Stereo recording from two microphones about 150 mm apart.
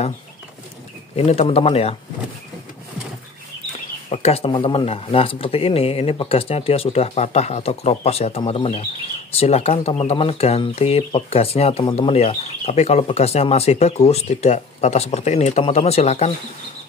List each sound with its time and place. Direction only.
1.1 s speech: 40° left (ahead or behind)
4.1 s speech: 40° left (ahead or behind)